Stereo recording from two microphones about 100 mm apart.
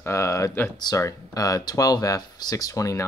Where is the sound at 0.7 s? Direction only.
45° left (ahead or behind).